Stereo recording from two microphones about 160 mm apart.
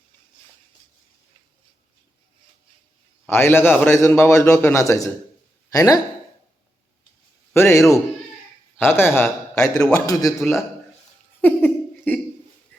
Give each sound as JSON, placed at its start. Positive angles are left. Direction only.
{"t": 3.2, "sound": "a man's voice", "side_deg": 15}
{"t": 7.5, "sound": "a man's voice", "side_deg": 15}
{"t": 8.8, "sound": "a man's voice", "side_deg": 15}
{"t": 11.3, "sound": "laughter", "side_deg": 10}